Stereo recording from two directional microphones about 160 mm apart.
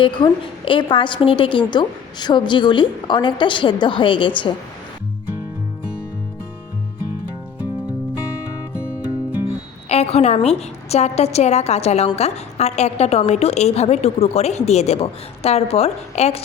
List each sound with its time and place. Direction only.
0.0 s a woman's voice: 30° left (ahead or behind)
9.9 s a woman's voice: 40° left (ahead or behind)